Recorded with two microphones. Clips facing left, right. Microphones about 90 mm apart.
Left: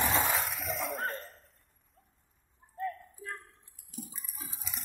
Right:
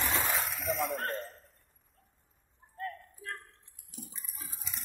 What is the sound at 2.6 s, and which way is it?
Water, centre (ahead or behind).